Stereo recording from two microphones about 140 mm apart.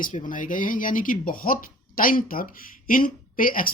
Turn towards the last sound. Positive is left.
turn(degrees=90)